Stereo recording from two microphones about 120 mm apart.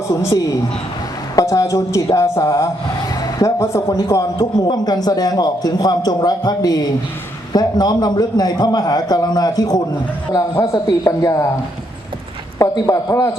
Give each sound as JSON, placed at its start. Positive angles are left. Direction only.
{"t": 0.1, "sound": "a woman's voice", "side_deg": 25}
{"t": 12.5, "sound": "a woman's voice", "side_deg": 30}